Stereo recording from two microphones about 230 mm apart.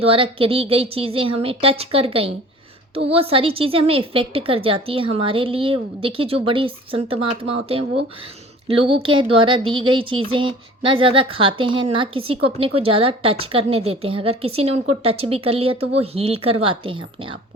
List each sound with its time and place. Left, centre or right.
0.0 s speech: right